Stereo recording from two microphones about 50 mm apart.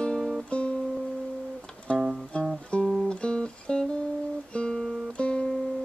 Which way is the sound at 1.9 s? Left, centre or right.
Left.